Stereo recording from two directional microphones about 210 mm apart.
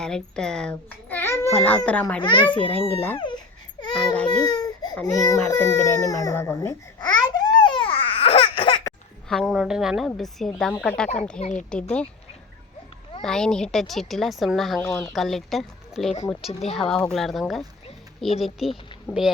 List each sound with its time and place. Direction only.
0.0 s a child's voice: 5° left (ahead or behind)
3.2 s speech: 20° left (ahead or behind)
3.9 s baby cry: 5° left (ahead or behind)
4.4 s baby cry: 20° left (ahead or behind)
4.9 s a child's voice: 15° left (ahead or behind)
6.1 s babbling: 15° left (ahead or behind)
9.3 s speech: centre (ahead or behind)
11.3 s a child's voice: 35° left (ahead or behind)
11.7 s speech: 5° left (ahead or behind)
13.2 s speech: centre (ahead or behind)
14.8 s a child's voice: 10° left (ahead or behind)
15.1 s a woman's voice: centre (ahead or behind)